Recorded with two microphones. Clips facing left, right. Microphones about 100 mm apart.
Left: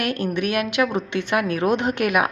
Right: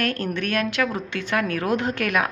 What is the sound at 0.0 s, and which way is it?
Speech, 15° left (ahead or behind).